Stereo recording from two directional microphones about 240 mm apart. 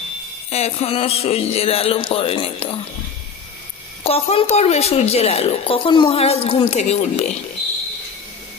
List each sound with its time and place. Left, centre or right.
0.5 s a woman's voice: left
4.0 s a woman's voice: left